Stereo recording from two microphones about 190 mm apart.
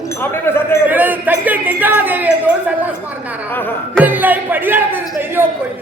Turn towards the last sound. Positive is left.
turn(degrees=-10)  # may be behind; listen again after turning